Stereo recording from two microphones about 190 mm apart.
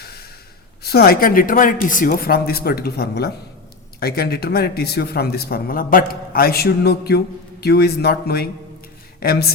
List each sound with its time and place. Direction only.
0.0 s sigh: 55° left (ahead or behind)
0.8 s speech: 55° left (ahead or behind)